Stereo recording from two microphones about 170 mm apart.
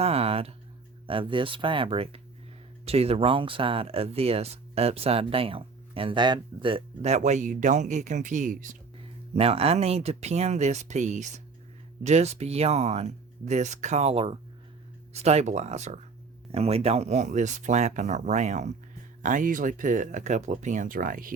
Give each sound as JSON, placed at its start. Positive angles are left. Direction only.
{"t": 0.0, "sound": "a sound", "side_deg": -35}
{"t": 1.0, "sound": "speech", "side_deg": -30}
{"t": 9.3, "sound": "speech", "side_deg": -35}